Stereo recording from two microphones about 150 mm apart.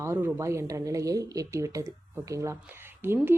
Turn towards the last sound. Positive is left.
turn(degrees=-15)  # may be behind; listen again after turning